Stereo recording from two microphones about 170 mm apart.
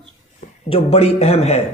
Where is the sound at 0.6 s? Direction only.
35° left (ahead or behind).